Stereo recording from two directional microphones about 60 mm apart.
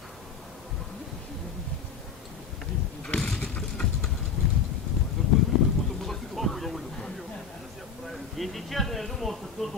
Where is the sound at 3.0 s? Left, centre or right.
Centre.